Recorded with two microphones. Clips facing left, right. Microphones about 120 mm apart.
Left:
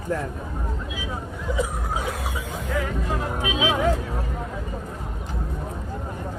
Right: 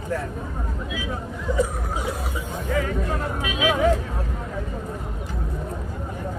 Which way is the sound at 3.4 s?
25° left (ahead or behind).